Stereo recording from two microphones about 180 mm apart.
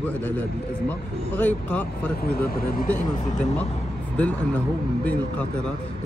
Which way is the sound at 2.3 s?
55° left (ahead or behind).